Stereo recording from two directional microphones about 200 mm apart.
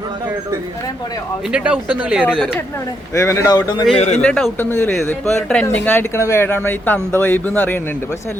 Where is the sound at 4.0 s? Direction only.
30° left (ahead or behind).